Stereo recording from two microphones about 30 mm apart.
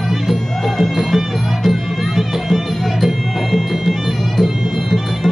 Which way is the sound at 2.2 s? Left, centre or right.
Centre.